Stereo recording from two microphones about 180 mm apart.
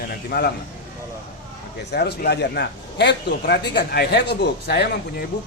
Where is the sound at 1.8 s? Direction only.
65° left (ahead or behind).